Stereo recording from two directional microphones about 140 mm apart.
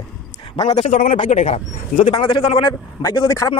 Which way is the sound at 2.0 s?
35° left (ahead or behind).